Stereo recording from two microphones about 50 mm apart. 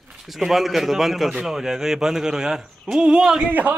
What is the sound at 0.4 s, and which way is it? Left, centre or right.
A man's voice, centre.